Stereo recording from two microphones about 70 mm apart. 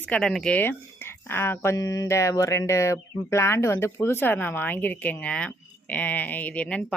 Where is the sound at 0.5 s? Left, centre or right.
Left.